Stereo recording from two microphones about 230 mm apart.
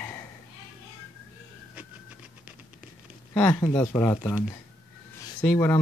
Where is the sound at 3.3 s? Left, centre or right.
Centre.